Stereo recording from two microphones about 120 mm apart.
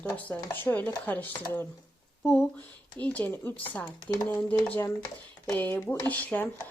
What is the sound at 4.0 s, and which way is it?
Speech, 35° left (ahead or behind).